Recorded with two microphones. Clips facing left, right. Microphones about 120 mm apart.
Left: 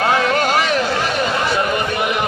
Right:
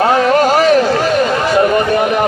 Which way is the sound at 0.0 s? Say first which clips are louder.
Right 6 dB; 40° right (ahead or behind).